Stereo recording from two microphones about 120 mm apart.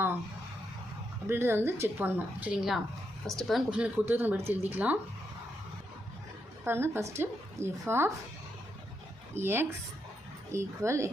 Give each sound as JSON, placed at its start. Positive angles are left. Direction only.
{"t": 1.3, "sound": "speech", "side_deg": -20}
{"t": 6.7, "sound": "speech", "side_deg": -20}
{"t": 9.3, "sound": "speech", "side_deg": -20}